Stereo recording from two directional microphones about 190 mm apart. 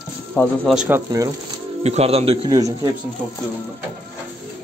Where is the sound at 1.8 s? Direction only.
30° right (ahead or behind).